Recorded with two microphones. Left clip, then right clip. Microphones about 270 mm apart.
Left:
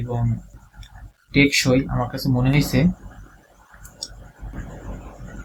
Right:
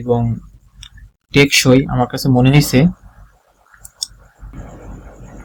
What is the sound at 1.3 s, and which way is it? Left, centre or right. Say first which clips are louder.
Speech: right 6 dB; right.